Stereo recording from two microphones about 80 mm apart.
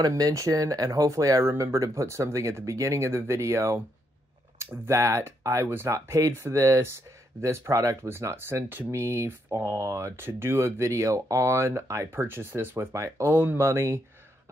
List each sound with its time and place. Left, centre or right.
0.2 s speech: right
13.3 s speech: right